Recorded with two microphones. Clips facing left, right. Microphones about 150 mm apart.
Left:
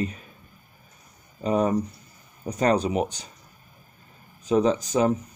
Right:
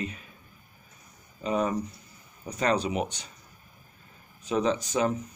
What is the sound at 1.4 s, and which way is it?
Speech, 35° left (ahead or behind).